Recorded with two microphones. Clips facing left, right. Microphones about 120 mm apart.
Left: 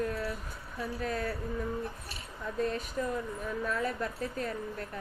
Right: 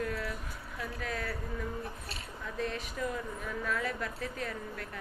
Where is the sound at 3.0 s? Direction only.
30° left (ahead or behind).